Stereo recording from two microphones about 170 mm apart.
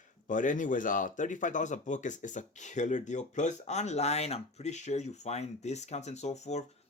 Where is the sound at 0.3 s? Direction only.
50° left (ahead or behind).